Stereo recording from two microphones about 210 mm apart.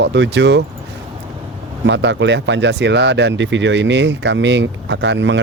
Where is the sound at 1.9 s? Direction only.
55° right (ahead or behind).